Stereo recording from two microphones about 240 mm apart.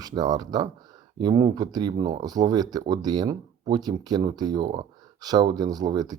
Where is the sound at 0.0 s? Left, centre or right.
Centre.